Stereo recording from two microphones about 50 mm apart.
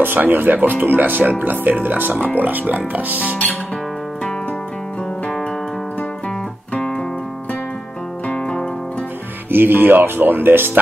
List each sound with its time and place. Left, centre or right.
0.0 s speech: right
8.4 s music: centre
9.5 s speech: right